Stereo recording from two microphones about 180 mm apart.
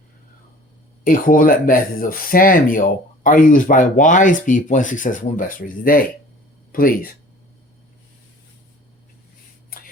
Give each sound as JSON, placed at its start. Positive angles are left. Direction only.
{"t": 1.0, "sound": "speech", "side_deg": 50}